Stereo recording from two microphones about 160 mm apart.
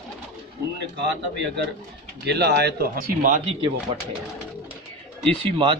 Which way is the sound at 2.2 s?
90° right.